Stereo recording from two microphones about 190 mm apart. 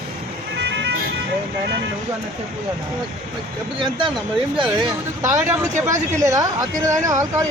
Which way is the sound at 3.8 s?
25° right (ahead or behind).